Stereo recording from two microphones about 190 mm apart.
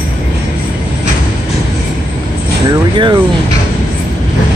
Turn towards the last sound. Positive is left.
turn(degrees=-25)  # may be behind; listen again after turning